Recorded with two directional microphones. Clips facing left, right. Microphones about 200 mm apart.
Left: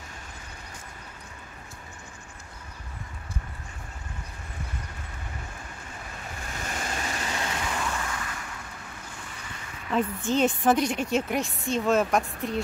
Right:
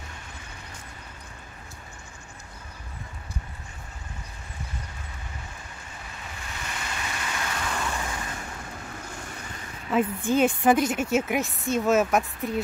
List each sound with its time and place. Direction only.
6.4 s vehicle: 45° left (ahead or behind); by 7.6 s 25° left (ahead or behind)
8.0 s vehicle: 25° right (ahead or behind)
9.8 s a woman's voice: 10° right (ahead or behind)